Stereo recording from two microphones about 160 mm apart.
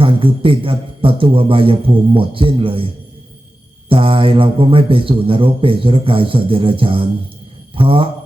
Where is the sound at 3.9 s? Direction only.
35° right (ahead or behind).